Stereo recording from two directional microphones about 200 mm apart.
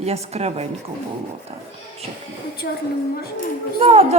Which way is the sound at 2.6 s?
50° left (ahead or behind).